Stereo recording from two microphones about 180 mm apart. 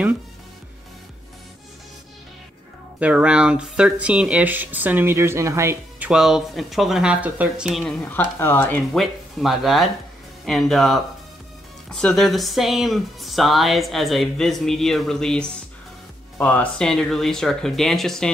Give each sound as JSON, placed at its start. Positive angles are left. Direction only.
{"t": 3.0, "sound": "speech", "side_deg": -5}
{"t": 8.1, "sound": "speech", "side_deg": 10}